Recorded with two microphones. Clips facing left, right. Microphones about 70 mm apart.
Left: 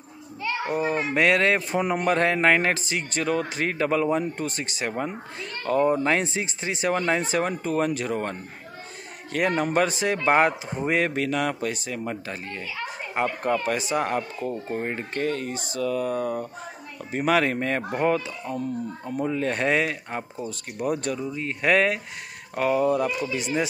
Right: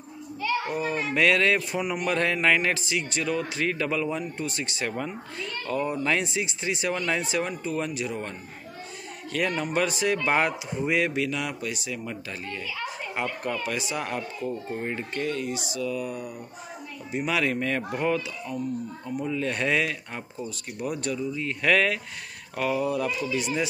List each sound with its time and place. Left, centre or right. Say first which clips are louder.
0.4 s a child's voice: left 1 dB; left
7.6 s a child's voice: left 5 dB; left
17.2 s a child's voice: left 4 dB; left
21.1 s a child's voice: even; left